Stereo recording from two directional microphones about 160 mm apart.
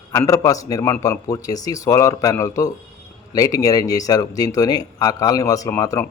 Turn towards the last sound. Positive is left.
turn(degrees=20)  # may be behind; listen again after turning